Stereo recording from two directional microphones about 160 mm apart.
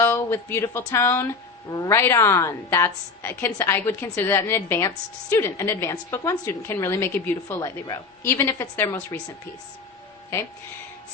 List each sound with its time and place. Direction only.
0.0 s a woman's voice: 15° left (ahead or behind)